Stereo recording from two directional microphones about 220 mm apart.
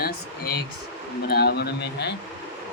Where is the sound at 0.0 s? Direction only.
45° left (ahead or behind).